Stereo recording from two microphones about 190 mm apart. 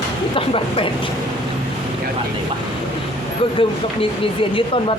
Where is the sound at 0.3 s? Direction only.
30° left (ahead or behind).